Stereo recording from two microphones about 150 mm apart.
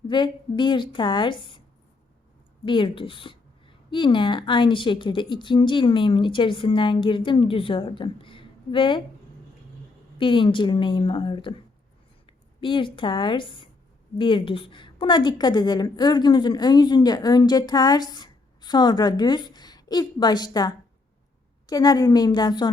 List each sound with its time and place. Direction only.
0.1 s speech: 30° left (ahead or behind)
2.6 s speech: 35° left (ahead or behind)
10.2 s a woman's voice: 35° left (ahead or behind)